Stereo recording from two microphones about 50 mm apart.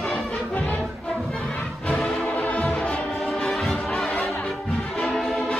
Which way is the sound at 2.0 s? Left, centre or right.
Left.